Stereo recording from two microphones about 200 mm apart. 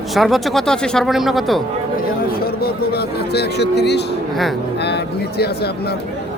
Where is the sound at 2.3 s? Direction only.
50° left (ahead or behind).